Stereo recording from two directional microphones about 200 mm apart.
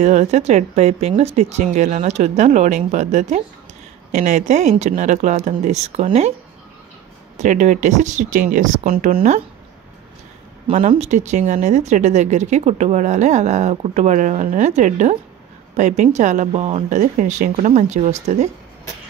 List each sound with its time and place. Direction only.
0.0 s speech: 35° right (ahead or behind)
7.3 s speech: 35° right (ahead or behind)
10.7 s speech: 35° right (ahead or behind)